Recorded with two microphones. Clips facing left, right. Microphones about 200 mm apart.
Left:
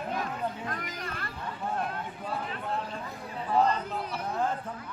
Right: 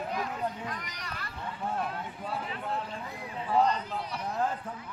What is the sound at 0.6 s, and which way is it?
Speech, 50° left (ahead or behind).